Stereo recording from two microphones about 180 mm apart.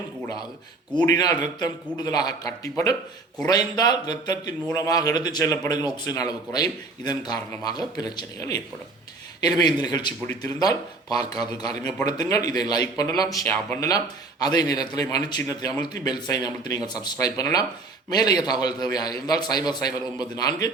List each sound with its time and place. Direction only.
1.0 s a man's voice: 20° left (ahead or behind)